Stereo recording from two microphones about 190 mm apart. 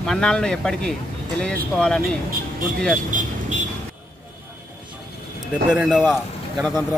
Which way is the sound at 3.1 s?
45° right (ahead or behind).